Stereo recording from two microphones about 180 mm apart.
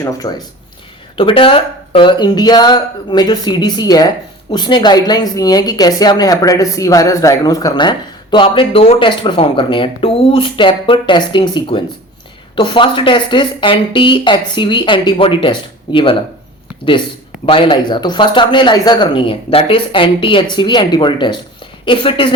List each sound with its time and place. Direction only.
0.0 s speech: 20° left (ahead or behind)
17.4 s speech: 30° left (ahead or behind)